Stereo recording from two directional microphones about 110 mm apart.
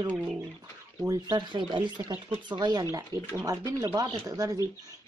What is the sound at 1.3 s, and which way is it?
Speech, 45° right (ahead or behind).